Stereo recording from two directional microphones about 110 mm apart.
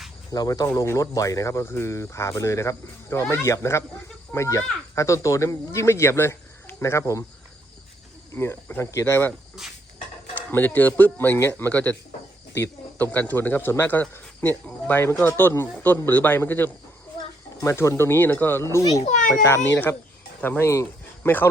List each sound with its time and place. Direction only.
0.3 s speech: 35° left (ahead or behind)
8.3 s speech: 20° left (ahead or behind)
10.5 s speech: 15° left (ahead or behind)
13.0 s speech: 15° left (ahead or behind); by 19.0 s 30° left (ahead or behind)
19.5 s speech: 20° left (ahead or behind)